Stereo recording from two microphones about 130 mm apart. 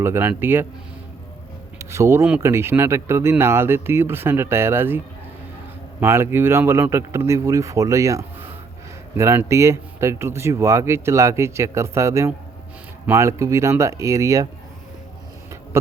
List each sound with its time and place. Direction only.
0.0 s a man's voice: 15° right (ahead or behind)
1.8 s speech: 20° right (ahead or behind)
6.0 s speech: 20° right (ahead or behind)
15.7 s speech: 20° right (ahead or behind)